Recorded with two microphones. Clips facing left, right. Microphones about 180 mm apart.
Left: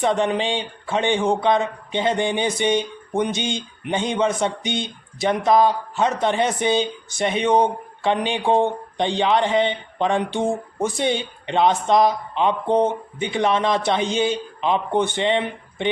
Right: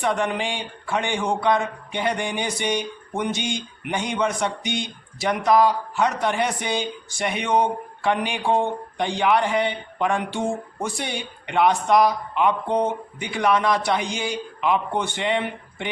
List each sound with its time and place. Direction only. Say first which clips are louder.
0.0 s speech: left 3 dB; 20° left (ahead or behind)